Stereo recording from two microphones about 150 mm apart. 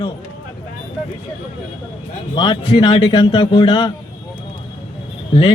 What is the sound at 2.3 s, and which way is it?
A man's voice, 35° left (ahead or behind).